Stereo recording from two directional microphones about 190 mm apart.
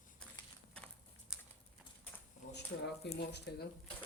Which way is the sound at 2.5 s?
65° left (ahead or behind).